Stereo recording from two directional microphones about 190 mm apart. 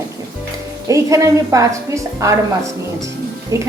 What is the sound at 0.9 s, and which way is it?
A woman's voice, 15° right (ahead or behind).